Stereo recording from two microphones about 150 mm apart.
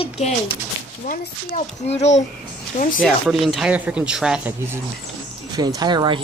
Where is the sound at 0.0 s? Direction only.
40° left (ahead or behind).